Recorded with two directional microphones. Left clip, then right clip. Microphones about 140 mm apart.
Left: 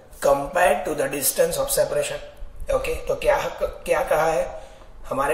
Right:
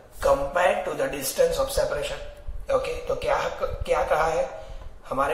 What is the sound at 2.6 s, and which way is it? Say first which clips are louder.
A man's voice: left 1 dB; 20° left (ahead or behind).